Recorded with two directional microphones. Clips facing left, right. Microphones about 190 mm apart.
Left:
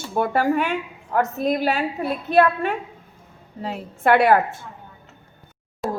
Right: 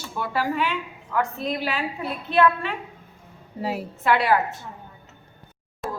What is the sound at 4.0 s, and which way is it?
Speech, 50° left (ahead or behind).